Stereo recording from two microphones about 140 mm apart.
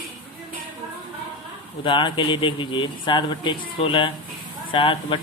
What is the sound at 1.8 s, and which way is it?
Speech, 35° left (ahead or behind).